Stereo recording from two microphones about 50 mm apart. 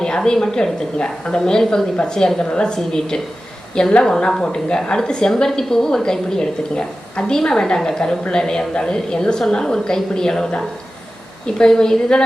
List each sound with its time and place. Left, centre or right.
0.0 s a woman's voice: centre